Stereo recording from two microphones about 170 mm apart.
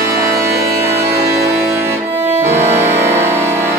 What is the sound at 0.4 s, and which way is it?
Music, 15° right (ahead or behind).